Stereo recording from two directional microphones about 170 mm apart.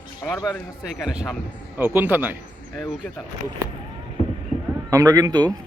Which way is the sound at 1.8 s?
10° right (ahead or behind).